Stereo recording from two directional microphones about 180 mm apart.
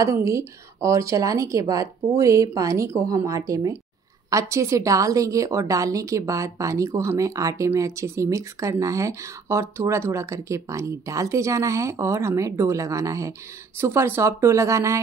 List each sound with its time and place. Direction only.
0.0 s a woman's voice: 15° right (ahead or behind)